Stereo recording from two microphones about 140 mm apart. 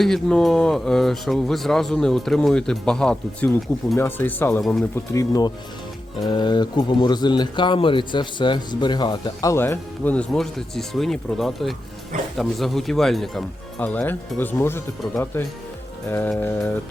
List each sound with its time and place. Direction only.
0.0 s speech: 5° left (ahead or behind)
4.6 s speech: 5° left (ahead or behind)
5.1 s speech: 25° left (ahead or behind); by 13.8 s centre (ahead or behind)
13.8 s speech: 15° left (ahead or behind)